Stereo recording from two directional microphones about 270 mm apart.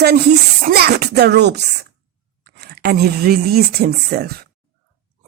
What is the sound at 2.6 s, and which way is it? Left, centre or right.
Speech, right.